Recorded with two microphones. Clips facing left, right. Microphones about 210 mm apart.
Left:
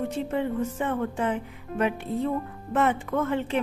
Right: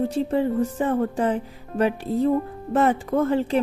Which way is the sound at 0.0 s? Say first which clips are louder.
Right 5 dB; 35° right (ahead or behind).